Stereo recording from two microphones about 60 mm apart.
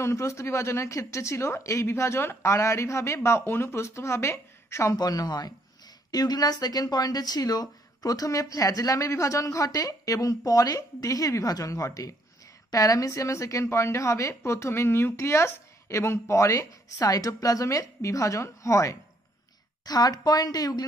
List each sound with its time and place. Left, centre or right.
0.0 s a woman's voice: left
4.9 s speech: left
8.9 s a woman's voice: left
19.8 s speech: left